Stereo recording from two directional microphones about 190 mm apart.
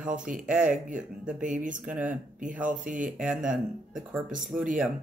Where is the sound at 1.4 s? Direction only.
40° right (ahead or behind).